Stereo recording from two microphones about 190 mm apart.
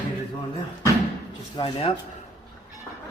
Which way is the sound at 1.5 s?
25° left (ahead or behind).